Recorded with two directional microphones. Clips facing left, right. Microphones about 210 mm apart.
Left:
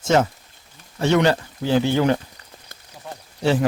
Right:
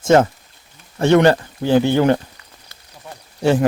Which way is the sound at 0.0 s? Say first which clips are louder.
Right 5 dB; 50° right (ahead or behind).